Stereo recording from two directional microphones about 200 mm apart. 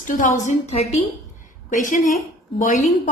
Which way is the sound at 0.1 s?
40° left (ahead or behind).